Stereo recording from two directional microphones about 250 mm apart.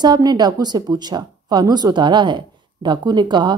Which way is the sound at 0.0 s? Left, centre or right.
Centre.